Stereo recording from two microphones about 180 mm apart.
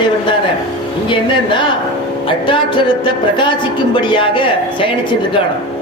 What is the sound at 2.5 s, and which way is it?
Speech, 25° left (ahead or behind).